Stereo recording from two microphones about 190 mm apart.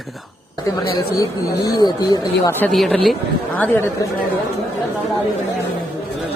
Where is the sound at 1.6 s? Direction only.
20° left (ahead or behind).